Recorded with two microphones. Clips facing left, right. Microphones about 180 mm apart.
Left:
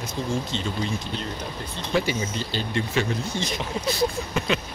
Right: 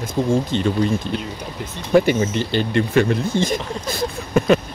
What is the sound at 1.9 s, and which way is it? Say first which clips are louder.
Speech: right 10 dB; 55° right (ahead or behind).